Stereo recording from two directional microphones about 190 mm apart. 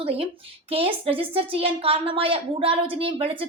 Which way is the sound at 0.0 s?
30° right (ahead or behind).